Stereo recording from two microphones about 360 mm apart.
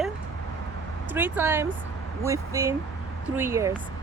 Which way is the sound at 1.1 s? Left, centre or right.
Centre.